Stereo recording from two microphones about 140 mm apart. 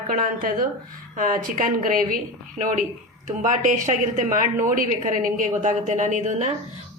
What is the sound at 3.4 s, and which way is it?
A woman's voice, 65° right (ahead or behind).